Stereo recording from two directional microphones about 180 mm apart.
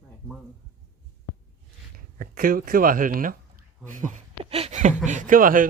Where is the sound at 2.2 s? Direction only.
50° right (ahead or behind).